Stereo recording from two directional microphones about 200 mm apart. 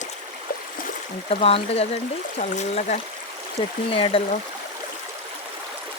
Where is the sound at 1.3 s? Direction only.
30° left (ahead or behind).